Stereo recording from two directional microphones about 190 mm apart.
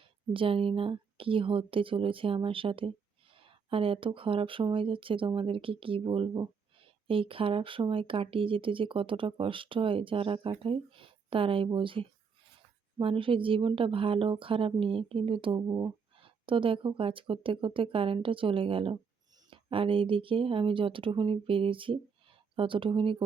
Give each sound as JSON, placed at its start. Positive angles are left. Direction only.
{"t": 0.3, "sound": "a woman's voice", "side_deg": -30}